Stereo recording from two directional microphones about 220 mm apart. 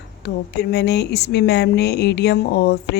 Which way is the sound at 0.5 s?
50° left (ahead or behind).